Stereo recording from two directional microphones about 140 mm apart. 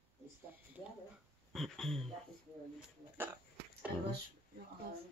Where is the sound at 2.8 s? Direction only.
15° right (ahead or behind).